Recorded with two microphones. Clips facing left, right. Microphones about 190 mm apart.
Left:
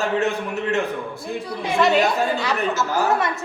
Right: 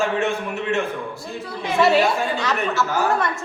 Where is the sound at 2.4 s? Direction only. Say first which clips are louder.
Even; 15° left (ahead or behind).